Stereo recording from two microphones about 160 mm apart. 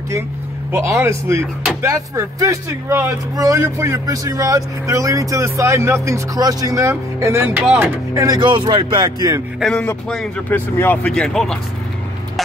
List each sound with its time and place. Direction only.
0.7 s speech: 15° right (ahead or behind)
7.6 s a man's voice: 5° right (ahead or behind)
8.1 s speech: 20° right (ahead or behind)
8.4 s speech: 30° right (ahead or behind)
9.6 s a man's voice: 5° left (ahead or behind)